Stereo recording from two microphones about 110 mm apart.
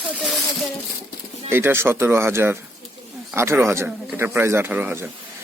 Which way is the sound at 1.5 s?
20° right (ahead or behind).